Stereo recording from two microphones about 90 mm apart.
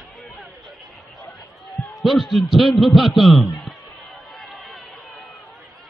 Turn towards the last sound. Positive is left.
turn(degrees=0)  # may be behind; listen again after turning